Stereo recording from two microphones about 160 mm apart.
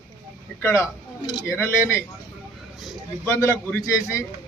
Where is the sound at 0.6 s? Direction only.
15° left (ahead or behind).